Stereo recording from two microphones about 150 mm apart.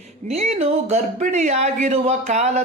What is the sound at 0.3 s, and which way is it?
A woman's voice, 45° right (ahead or behind).